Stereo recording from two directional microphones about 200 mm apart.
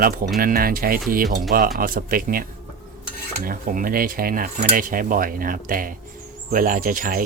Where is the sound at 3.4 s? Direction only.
45° right (ahead or behind).